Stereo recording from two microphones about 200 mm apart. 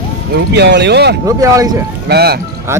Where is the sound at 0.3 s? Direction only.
60° right (ahead or behind).